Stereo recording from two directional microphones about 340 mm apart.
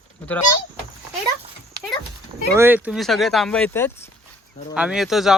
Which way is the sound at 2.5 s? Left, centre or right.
Centre.